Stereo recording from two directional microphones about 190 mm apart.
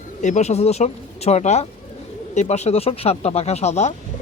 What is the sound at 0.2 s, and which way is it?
Speech, 40° left (ahead or behind).